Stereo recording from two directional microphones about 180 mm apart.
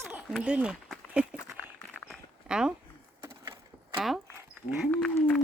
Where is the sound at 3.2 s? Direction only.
15° right (ahead or behind).